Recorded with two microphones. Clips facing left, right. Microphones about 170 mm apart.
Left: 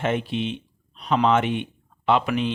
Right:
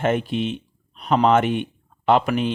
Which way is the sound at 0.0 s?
50° right (ahead or behind).